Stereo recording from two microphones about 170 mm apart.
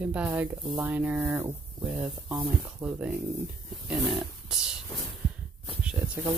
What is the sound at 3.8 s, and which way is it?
Wild animals, centre (ahead or behind).